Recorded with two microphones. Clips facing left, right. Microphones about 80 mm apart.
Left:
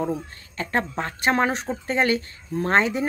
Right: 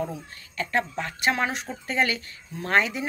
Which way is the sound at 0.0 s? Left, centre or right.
Left.